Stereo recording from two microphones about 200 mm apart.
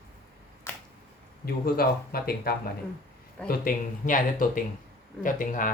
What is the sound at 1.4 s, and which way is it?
Speech, 50° left (ahead or behind).